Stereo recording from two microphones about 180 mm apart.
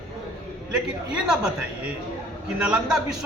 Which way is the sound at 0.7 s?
5° right (ahead or behind).